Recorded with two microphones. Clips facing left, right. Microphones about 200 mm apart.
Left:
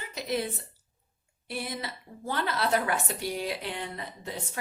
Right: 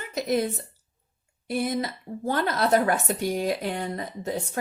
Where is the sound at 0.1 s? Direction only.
45° right (ahead or behind).